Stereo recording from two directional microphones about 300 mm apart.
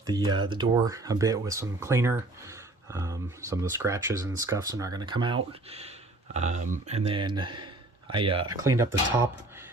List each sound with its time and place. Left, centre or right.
0.0 s speech: centre